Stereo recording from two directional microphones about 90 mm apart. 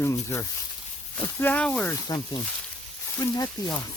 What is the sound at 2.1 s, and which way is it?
Speech, 45° left (ahead or behind).